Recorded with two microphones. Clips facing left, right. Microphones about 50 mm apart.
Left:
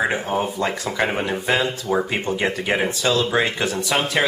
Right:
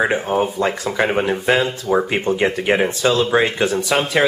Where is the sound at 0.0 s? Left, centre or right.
Centre.